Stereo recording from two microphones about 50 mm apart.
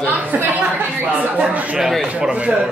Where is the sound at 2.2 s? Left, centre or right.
Centre.